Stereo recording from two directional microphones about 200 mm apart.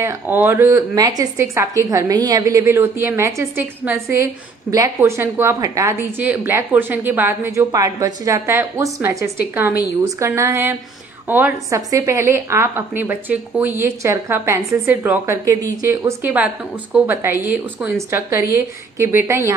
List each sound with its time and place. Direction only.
0.0 s a woman's voice: 10° right (ahead or behind)